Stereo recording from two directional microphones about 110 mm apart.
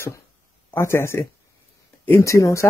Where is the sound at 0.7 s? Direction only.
25° left (ahead or behind).